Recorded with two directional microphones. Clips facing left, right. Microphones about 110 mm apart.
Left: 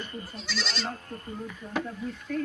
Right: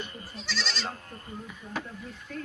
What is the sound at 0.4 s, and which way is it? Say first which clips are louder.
Speech: even; centre (ahead or behind).